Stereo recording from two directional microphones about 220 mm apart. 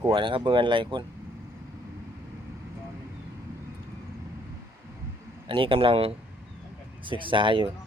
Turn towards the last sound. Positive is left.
turn(degrees=-25)  # may be behind; listen again after turning